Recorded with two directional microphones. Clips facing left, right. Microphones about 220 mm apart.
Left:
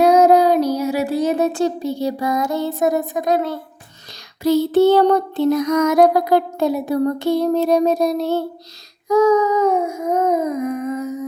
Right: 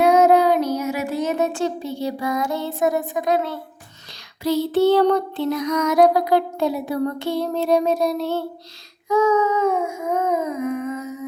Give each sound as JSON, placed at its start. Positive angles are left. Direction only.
{"t": 0.0, "sound": "child singing", "side_deg": 35}
{"t": 4.4, "sound": "music", "side_deg": 45}
{"t": 9.0, "sound": "a sound", "side_deg": 40}